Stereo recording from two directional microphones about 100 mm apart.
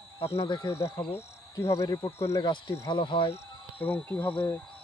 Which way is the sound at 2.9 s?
55° left (ahead or behind).